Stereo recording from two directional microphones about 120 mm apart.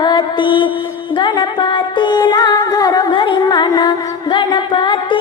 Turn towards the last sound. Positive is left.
turn(degrees=45)  # may be behind; listen again after turning